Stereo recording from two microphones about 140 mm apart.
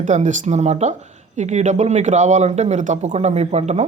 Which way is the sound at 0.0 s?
60° right (ahead or behind).